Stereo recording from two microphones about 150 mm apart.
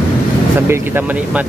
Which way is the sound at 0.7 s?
15° right (ahead or behind).